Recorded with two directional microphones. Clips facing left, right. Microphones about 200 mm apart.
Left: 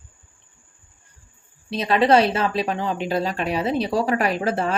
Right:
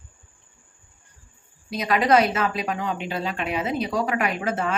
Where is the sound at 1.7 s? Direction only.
30° left (ahead or behind).